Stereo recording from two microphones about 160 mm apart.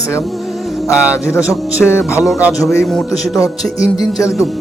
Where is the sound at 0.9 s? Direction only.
10° right (ahead or behind).